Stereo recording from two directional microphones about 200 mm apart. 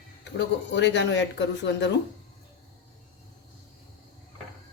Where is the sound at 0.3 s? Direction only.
60° left (ahead or behind).